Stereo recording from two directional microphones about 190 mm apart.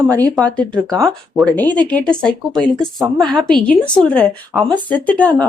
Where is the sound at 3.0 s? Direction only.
20° right (ahead or behind).